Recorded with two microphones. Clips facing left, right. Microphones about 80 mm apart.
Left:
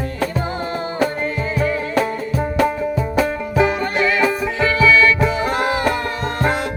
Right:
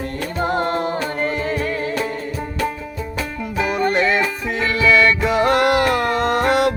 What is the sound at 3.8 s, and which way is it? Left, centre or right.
Music, right.